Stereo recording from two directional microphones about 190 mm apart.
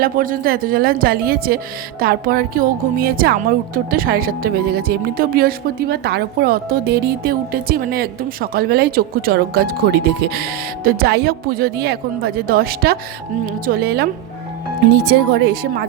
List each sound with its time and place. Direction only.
0.0 s speech: 50° right (ahead or behind)